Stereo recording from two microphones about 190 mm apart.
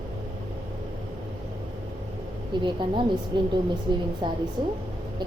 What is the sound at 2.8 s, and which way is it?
Speech, 25° right (ahead or behind).